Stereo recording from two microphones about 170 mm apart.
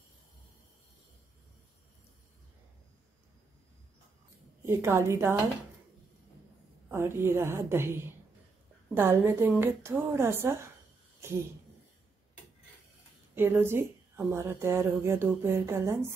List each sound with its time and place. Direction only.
4.6 s a woman's voice: 15° right (ahead or behind)
6.9 s a woman's voice: 15° right (ahead or behind)
13.3 s a woman's voice: 15° right (ahead or behind)